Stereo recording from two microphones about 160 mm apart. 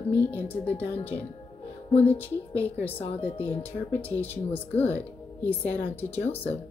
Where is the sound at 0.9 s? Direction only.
40° left (ahead or behind).